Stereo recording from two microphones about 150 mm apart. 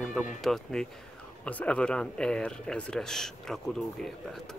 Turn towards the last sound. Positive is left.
turn(degrees=0)  # may be behind; listen again after turning